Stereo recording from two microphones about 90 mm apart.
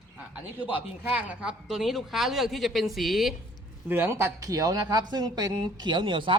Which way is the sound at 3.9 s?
25° right (ahead or behind).